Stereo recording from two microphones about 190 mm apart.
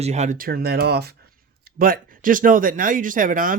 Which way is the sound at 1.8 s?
45° right (ahead or behind).